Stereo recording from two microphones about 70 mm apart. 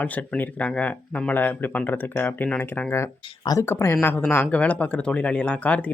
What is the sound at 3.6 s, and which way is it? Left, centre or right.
Speech, left.